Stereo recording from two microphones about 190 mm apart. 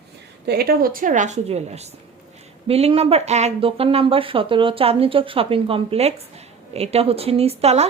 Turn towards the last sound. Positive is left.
turn(degrees=-35)  # may be behind; listen again after turning